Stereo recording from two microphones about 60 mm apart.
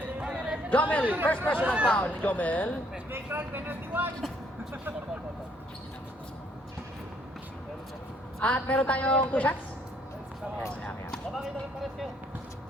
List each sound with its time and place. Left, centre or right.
0.2 s a sound: centre
0.7 s speech: left
1.0 s speech: right
1.9 s speech: left
3.1 s speech: right
8.4 s speech: left
11.3 s speech: centre